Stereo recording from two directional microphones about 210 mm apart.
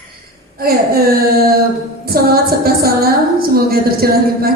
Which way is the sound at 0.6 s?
45° right (ahead or behind).